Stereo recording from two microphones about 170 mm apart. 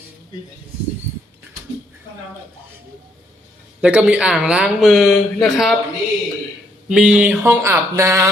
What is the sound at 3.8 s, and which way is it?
Speech, 5° right (ahead or behind).